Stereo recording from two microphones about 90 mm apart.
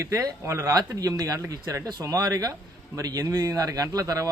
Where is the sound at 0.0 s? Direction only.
35° right (ahead or behind).